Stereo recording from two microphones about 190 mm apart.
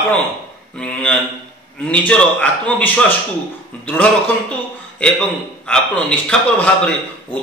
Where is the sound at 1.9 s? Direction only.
5° left (ahead or behind).